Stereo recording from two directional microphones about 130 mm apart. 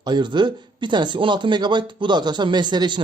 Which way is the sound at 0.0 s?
35° right (ahead or behind).